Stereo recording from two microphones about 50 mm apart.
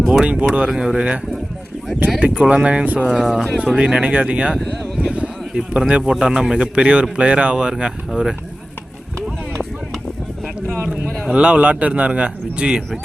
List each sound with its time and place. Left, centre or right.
0.0 s speech: centre
0.3 s a man's voice: right
0.7 s speech: centre
0.9 s a man's voice: right
2.4 s a man's voice: right
3.1 s speech: centre
3.8 s a man's voice: centre
4.5 s speech: centre
4.9 s a sound: right
5.5 s speech: centre
11.3 s a man's voice: right